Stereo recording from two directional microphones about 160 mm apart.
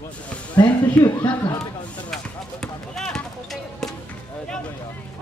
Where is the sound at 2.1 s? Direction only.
5° left (ahead or behind).